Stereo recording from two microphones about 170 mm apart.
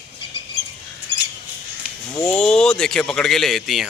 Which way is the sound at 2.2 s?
5° left (ahead or behind).